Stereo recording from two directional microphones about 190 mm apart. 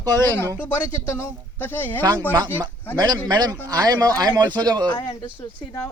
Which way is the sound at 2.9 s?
20° right (ahead or behind).